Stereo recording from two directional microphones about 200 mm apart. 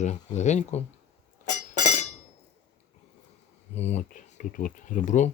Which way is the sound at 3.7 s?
35° left (ahead or behind).